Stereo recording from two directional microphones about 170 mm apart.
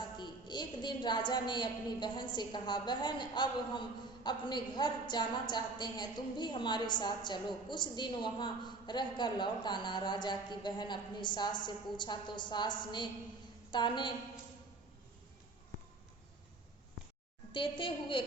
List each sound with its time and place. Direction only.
0.2 s a woman's voice: 25° left (ahead or behind)
17.5 s a woman's voice: 30° left (ahead or behind)